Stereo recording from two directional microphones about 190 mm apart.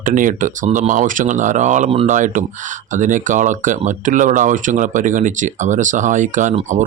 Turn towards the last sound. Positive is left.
turn(degrees=-40)  # may be behind; listen again after turning